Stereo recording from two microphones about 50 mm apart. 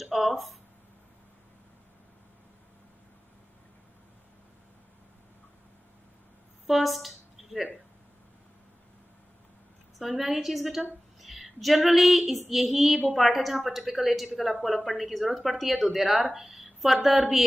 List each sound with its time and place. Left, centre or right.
0.0 s speech: centre
6.7 s speech: centre
9.9 s a woman's voice: centre